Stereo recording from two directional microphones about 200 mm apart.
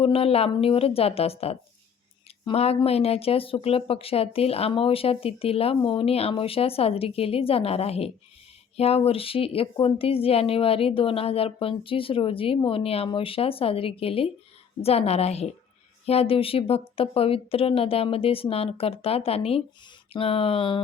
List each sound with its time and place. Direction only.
0.0 s a woman's voice: 30° left (ahead or behind)